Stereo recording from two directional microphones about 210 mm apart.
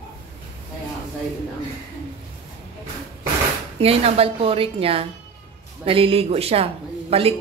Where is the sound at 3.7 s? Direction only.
30° right (ahead or behind).